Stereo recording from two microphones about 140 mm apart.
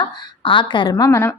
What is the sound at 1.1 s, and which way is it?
Speech, 15° left (ahead or behind).